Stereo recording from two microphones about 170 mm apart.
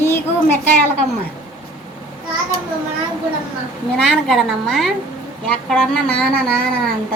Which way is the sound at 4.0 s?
Centre (ahead or behind).